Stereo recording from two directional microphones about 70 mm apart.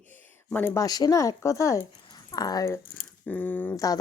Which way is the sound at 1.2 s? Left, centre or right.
Left.